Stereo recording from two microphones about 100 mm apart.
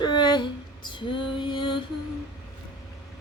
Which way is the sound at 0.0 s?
45° left (ahead or behind).